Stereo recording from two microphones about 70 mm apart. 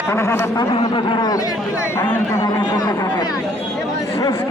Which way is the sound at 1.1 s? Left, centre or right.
Left.